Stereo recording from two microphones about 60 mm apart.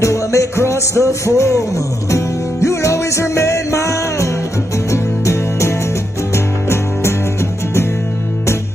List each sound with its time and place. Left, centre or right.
0.0 s music: left